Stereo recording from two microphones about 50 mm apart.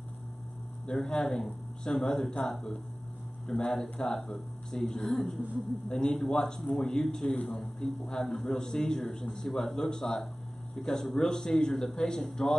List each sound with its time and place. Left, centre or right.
0.9 s a man's voice: centre
7.3 s a man's voice: left
7.8 s a man's voice: centre